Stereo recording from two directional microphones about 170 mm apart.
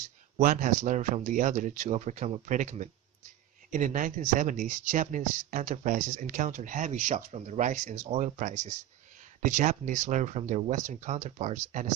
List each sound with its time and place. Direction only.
0.3 s speech: 50° right (ahead or behind)